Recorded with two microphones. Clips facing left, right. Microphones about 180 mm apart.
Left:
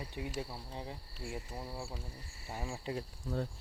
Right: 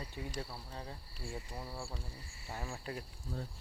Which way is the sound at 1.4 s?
5° left (ahead or behind).